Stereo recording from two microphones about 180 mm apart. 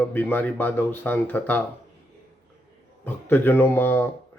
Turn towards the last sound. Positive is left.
turn(degrees=10)  # may be behind; listen again after turning